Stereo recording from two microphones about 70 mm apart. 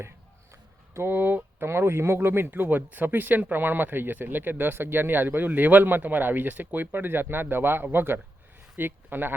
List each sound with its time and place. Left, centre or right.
0.9 s speech: right